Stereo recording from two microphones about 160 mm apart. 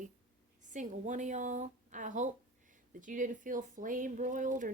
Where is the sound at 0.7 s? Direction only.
50° right (ahead or behind).